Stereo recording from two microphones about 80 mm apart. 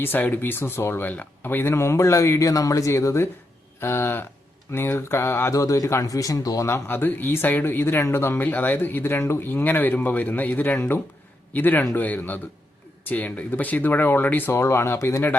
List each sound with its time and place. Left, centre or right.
0.0 s speech: left
6.7 s speech: left
14.6 s speech: left